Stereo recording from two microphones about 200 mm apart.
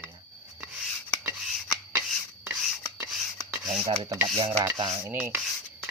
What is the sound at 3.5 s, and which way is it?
Filing, 15° right (ahead or behind).